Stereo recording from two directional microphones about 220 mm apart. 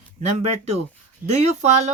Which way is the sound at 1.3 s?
30° right (ahead or behind).